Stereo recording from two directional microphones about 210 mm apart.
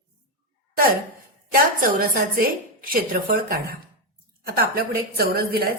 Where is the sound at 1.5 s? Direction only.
45° right (ahead or behind).